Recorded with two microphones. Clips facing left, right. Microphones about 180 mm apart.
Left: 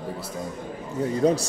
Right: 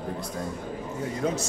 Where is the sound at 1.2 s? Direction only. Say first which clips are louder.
Left 7 dB; 35° left (ahead or behind).